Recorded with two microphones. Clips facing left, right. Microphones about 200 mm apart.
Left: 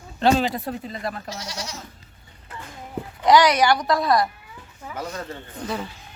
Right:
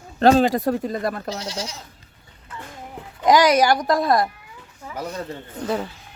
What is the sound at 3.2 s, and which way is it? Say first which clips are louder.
Speech: right 1 dB; 45° right (ahead or behind).